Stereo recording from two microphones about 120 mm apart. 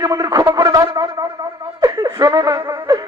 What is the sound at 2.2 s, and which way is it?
Music, 35° right (ahead or behind).